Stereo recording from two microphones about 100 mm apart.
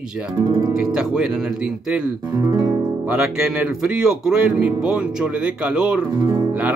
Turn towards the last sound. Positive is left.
turn(degrees=-45)  # may be behind; listen again after turning